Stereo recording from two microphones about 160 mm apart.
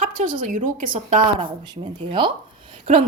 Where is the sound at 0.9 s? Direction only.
35° right (ahead or behind).